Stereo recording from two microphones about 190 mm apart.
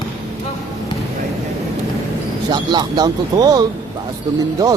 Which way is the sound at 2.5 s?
20° right (ahead or behind).